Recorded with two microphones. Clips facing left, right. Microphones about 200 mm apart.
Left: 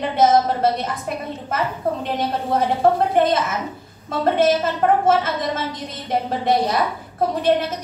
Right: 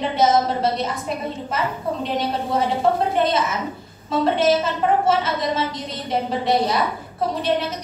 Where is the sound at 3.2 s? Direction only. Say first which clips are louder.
Left 2 dB; 50° left (ahead or behind).